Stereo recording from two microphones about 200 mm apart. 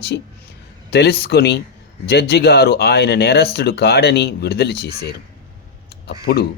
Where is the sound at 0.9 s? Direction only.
55° left (ahead or behind).